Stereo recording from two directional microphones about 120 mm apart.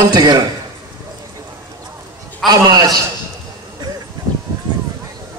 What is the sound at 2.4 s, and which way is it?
Speech, 30° right (ahead or behind).